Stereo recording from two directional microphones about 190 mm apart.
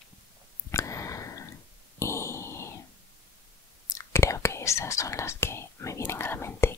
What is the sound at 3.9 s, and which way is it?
Whispering, 15° left (ahead or behind).